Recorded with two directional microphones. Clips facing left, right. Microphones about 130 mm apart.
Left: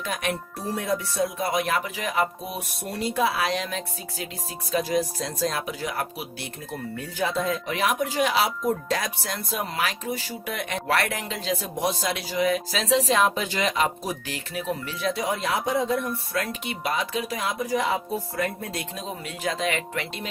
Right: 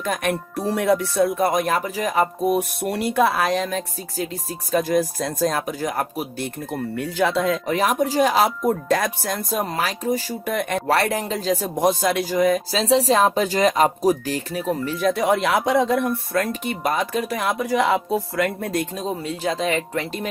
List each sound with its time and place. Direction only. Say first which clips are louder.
0.0 s speech: right 5 dB; 50° right (ahead or behind)
2.6 s speech: right 8 dB; 65° right (ahead or behind); by 6.5 s 45° right (ahead or behind)
6.9 s speech: right 6 dB; 75° right (ahead or behind)
7.7 s speech: right 5 dB; 40° right (ahead or behind)
10.9 s speech: right 5 dB; 35° right (ahead or behind)
12.7 s speech: right 5 dB; 30° right (ahead or behind); by 16.0 s 70° right (ahead or behind)
16.3 s speech: right 6 dB; 45° right (ahead or behind); by 18.7 s 80° right
18.7 s speech: right 8 dB; 45° right (ahead or behind)